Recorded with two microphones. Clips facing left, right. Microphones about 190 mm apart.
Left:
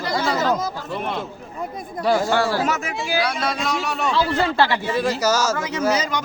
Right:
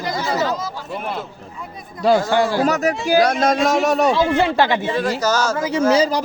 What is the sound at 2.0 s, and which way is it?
Speech, 20° right (ahead or behind).